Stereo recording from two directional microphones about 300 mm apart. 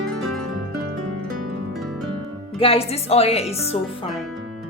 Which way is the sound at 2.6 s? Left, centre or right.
Centre.